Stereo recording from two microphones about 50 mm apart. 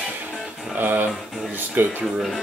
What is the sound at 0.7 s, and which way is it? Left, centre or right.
Speech, right.